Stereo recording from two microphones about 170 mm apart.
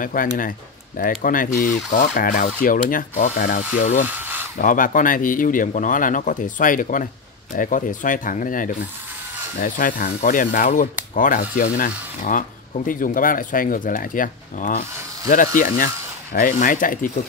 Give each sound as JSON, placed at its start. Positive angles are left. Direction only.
{"t": 0.0, "sound": "speech", "side_deg": 55}
{"t": 4.1, "sound": "a sound", "side_deg": -10}
{"t": 4.6, "sound": "speech", "side_deg": 55}